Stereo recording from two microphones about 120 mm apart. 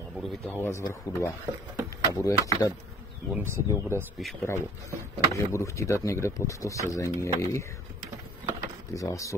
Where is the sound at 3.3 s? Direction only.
20° right (ahead or behind).